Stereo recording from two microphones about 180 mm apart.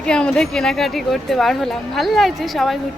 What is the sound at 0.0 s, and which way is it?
Speech, 5° left (ahead or behind).